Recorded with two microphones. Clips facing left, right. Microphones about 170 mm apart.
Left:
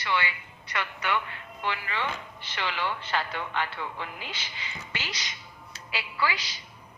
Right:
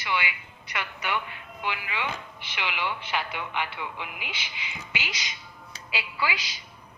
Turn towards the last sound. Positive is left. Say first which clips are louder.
# even
turn(degrees=-15)  # may be behind; listen again after turning